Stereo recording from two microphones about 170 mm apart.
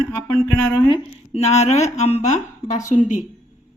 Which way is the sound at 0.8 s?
30° left (ahead or behind).